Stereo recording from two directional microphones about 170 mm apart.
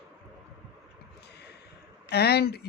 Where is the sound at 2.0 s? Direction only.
70° left (ahead or behind).